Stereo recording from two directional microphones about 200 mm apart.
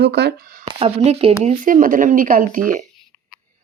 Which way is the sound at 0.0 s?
55° right (ahead or behind).